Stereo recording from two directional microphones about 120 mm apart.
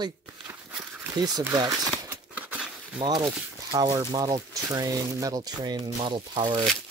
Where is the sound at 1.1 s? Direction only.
35° right (ahead or behind).